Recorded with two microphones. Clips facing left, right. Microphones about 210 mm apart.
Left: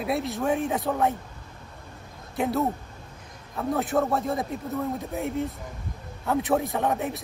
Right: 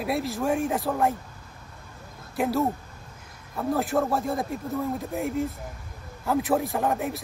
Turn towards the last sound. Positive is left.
turn(degrees=0)  # may be behind; listen again after turning